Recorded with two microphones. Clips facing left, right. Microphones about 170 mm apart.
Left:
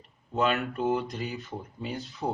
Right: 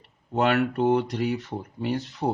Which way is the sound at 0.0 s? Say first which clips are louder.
Right 3 dB; 70° right (ahead or behind).